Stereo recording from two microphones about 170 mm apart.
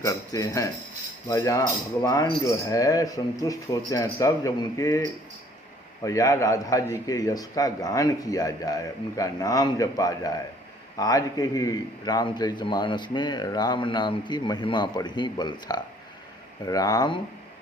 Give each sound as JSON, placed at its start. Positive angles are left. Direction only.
{"t": 0.0, "sound": "a man's voice", "side_deg": 20}